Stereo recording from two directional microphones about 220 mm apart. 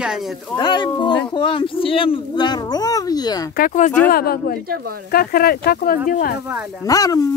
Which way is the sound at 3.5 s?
35° left (ahead or behind).